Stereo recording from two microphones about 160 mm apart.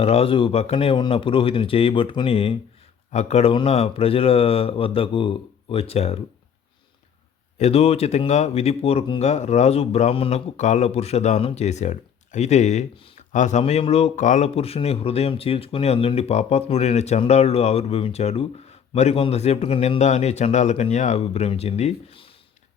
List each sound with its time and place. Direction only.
0.0 s speech: 40° left (ahead or behind)
7.6 s speech: 40° left (ahead or behind)